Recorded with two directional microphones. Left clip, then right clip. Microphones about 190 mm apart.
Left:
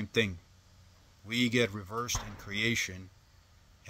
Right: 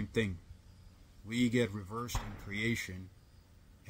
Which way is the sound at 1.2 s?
10° right (ahead or behind).